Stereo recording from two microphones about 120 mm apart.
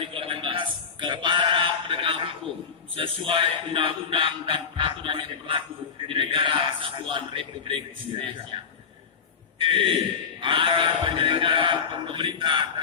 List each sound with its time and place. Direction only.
0.0 s music: 50° right (ahead or behind)
2.9 s a man's voice: 50° right (ahead or behind)
9.6 s a man's voice: 45° right (ahead or behind)